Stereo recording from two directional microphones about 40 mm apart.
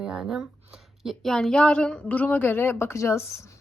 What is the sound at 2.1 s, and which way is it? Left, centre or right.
Speech, left.